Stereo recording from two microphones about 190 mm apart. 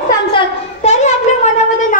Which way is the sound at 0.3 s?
30° left (ahead or behind).